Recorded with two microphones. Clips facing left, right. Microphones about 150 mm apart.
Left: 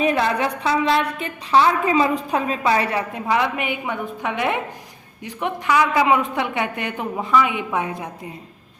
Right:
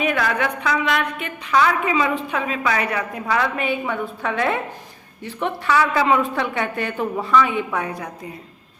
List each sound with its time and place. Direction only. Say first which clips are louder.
0.0 s a woman's voice: left 2 dB; 30° left (ahead or behind)